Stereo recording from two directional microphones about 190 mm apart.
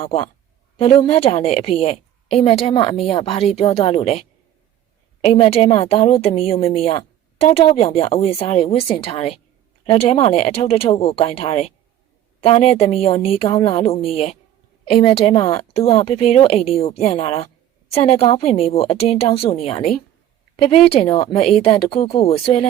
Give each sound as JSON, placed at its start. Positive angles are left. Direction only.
{"t": 0.0, "sound": "a woman's voice", "side_deg": 30}